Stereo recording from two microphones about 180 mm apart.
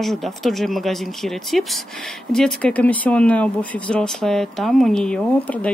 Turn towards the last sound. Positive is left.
turn(degrees=5)  # may be behind; listen again after turning